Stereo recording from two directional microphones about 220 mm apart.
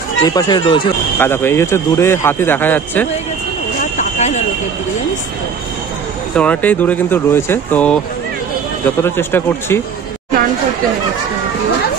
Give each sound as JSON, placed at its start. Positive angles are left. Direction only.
{"t": 0.2, "sound": "speech", "side_deg": 15}
{"t": 1.2, "sound": "a man's voice", "side_deg": 10}
{"t": 4.0, "sound": "a sound", "side_deg": 30}
{"t": 6.3, "sound": "a man's voice", "side_deg": 5}
{"t": 9.0, "sound": "a man's voice", "side_deg": 10}